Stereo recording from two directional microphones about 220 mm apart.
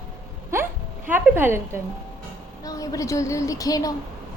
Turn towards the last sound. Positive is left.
turn(degrees=15)  # may be behind; listen again after turning